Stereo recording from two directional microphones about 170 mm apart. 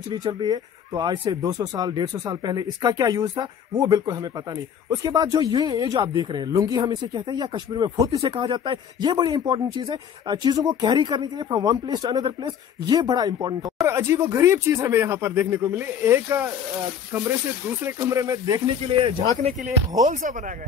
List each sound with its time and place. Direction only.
0.1 s speech: 25° right (ahead or behind)
17.9 s speech: 15° right (ahead or behind)
19.0 s speech: 40° right (ahead or behind)